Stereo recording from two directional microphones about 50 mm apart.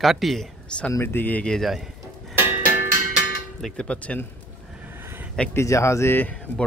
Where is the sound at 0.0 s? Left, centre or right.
Centre.